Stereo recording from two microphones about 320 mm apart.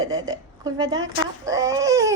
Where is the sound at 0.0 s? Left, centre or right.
Centre.